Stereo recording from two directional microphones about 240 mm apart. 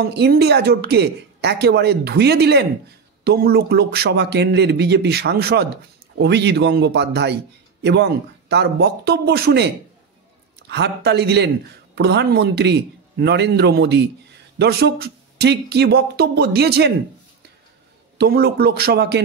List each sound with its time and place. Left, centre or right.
0.0 s a man's voice: right
10.7 s a man's voice: right
18.1 s a man's voice: right